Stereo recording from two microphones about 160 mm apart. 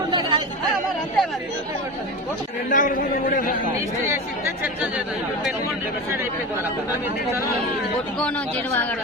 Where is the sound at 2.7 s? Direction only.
55° left (ahead or behind).